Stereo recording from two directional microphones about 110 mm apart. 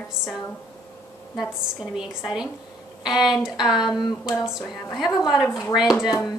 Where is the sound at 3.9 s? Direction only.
40° left (ahead or behind).